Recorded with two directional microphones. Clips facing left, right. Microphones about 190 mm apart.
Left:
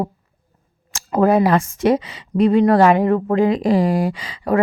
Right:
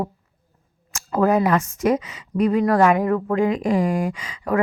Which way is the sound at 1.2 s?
30° left (ahead or behind).